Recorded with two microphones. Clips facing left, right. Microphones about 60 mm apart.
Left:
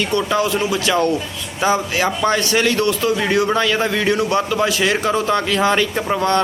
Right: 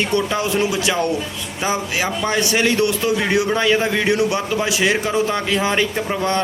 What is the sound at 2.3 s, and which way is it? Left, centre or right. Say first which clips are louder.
Speech: left 1 dB; centre.